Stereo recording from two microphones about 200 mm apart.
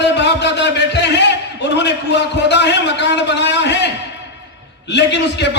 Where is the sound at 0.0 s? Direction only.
60° left (ahead or behind).